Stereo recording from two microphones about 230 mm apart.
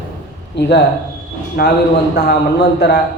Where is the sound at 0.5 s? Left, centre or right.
Left.